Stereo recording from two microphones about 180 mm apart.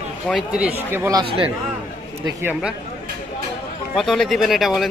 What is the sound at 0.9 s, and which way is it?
Speech, 15° right (ahead or behind).